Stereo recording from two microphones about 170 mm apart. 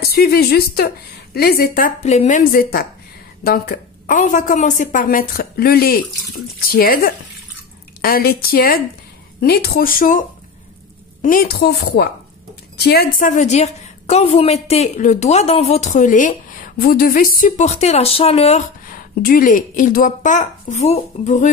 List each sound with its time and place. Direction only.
0.0 s speech: 65° left (ahead or behind)
2.0 s a woman's voice: 45° left (ahead or behind); by 4.2 s 60° left (ahead or behind)
4.2 s a woman's voice: 50° left (ahead or behind)
11.2 s a woman's voice: 60° left (ahead or behind); by 18.6 s 40° left (ahead or behind)
18.9 s a woman's voice: 55° left (ahead or behind)